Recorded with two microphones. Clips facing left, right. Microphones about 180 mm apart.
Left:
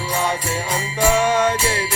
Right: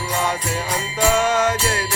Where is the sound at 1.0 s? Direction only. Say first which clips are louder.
Left 1 dB; centre (ahead or behind).